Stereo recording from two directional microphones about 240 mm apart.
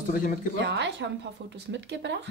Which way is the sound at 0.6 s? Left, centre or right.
Right.